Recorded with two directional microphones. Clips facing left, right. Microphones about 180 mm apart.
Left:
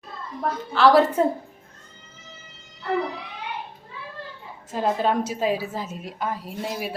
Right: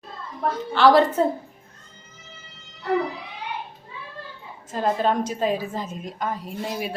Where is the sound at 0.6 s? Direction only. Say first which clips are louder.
Even; centre (ahead or behind).